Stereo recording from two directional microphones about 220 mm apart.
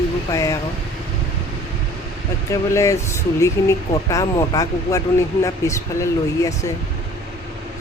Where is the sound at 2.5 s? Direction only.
15° left (ahead or behind).